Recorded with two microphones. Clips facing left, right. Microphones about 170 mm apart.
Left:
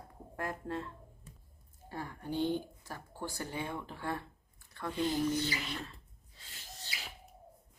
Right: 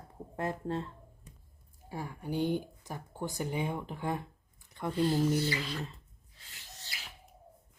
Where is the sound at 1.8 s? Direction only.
10° right (ahead or behind).